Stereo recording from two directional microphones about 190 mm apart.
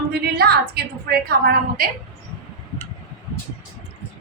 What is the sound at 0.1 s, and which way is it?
Speech, 55° right (ahead or behind).